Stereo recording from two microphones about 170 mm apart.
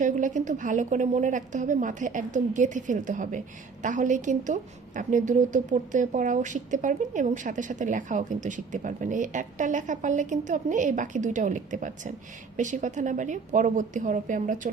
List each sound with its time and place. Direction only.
0.0 s a woman's voice: 50° right (ahead or behind)